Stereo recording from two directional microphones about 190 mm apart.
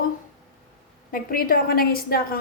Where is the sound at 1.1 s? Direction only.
45° left (ahead or behind).